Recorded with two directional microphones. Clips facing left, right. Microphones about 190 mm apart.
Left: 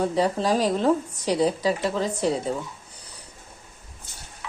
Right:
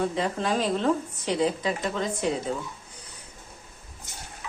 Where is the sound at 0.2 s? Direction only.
40° left (ahead or behind).